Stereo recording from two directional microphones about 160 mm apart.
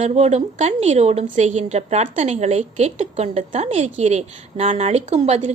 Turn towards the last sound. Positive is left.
turn(degrees=-45)  # may be behind; listen again after turning